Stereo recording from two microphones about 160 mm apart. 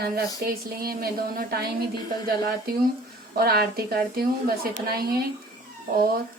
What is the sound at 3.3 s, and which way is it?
Speech, 75° right (ahead or behind).